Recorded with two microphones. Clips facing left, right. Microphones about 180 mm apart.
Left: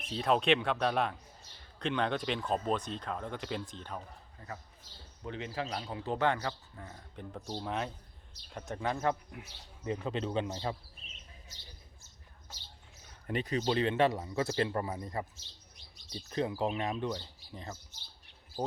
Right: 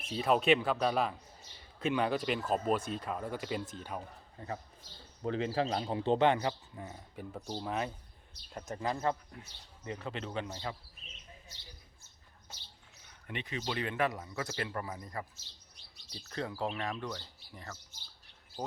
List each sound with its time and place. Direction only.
0.1 s speech: 5° right (ahead or behind)
4.4 s a man's voice: 30° right (ahead or behind); by 9.5 s 10° left (ahead or behind)
9.8 s speech: 20° left (ahead or behind)
13.2 s speech: 40° left (ahead or behind); by 17.7 s 20° left (ahead or behind)